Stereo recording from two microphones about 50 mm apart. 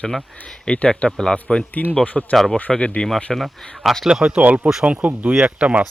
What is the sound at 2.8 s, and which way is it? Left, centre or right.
Speech, centre.